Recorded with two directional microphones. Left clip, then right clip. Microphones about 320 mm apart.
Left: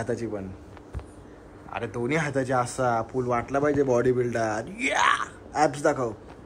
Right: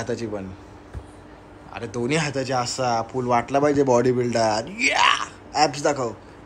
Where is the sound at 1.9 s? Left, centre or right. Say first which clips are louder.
Right 4 dB; centre.